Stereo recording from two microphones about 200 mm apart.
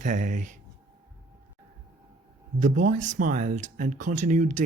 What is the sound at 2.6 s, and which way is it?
Speech, 40° right (ahead or behind).